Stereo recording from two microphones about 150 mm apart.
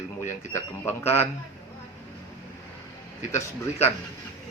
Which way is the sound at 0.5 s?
15° left (ahead or behind).